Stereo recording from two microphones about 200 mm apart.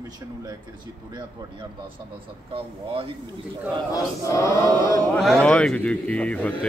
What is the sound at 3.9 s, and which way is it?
Chant, 15° left (ahead or behind).